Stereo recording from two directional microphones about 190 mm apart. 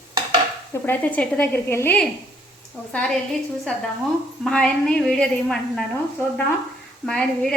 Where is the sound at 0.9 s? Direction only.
10° left (ahead or behind).